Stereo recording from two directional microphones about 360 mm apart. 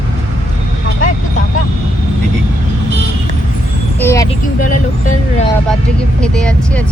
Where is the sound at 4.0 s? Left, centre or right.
Centre.